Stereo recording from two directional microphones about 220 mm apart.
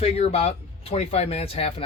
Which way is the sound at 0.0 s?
30° left (ahead or behind).